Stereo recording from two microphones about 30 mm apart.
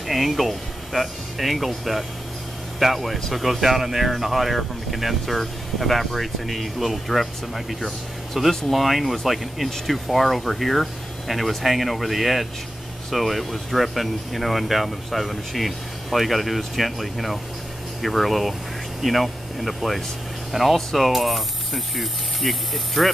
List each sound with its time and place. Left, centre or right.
0.0 s speech: centre